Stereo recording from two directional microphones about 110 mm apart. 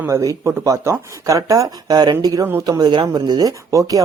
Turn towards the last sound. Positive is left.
turn(degrees=-30)  # may be behind; listen again after turning